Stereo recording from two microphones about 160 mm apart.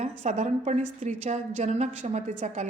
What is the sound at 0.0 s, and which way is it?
A woman's voice, 50° right (ahead or behind).